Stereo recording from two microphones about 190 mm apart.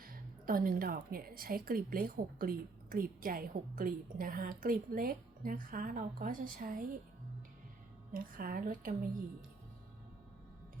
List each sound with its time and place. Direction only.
0.0 s a woman's voice: 50° right (ahead or behind)
8.1 s a woman's voice: 45° right (ahead or behind)